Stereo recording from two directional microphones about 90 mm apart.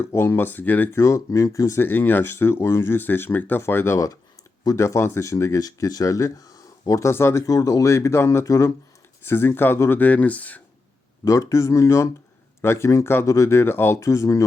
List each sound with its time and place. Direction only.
0.0 s speech: 30° left (ahead or behind)
0.9 s speech: 35° left (ahead or behind)
1.8 s speech: 25° left (ahead or behind)
9.2 s speech: 25° left (ahead or behind)
10.0 s speech: 15° left (ahead or behind)
11.3 s speech: 35° left (ahead or behind)